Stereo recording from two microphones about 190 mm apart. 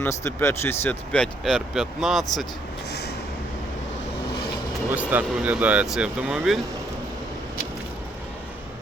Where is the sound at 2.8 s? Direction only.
60° left (ahead or behind).